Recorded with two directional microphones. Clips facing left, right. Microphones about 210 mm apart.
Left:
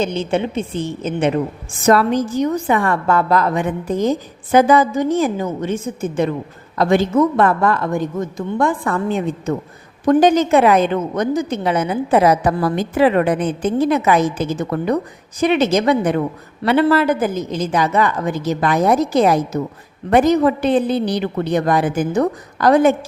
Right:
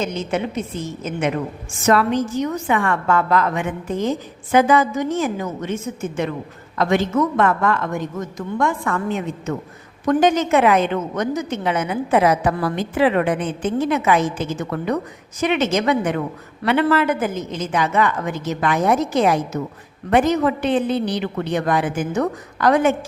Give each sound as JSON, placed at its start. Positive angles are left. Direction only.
{"t": 0.0, "sound": "a woman's voice", "side_deg": 30}